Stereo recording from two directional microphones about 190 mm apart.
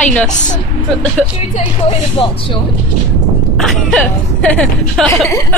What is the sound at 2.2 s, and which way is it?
Speech, 30° left (ahead or behind).